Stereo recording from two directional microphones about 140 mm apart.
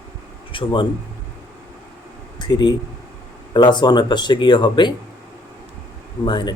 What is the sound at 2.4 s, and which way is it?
Speech, 30° left (ahead or behind).